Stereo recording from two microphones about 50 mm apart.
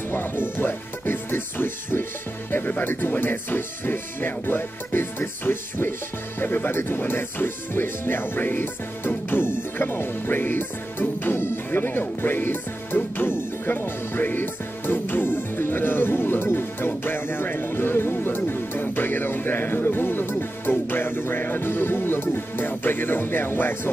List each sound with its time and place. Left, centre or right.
0.1 s speech: left
6.4 s music: left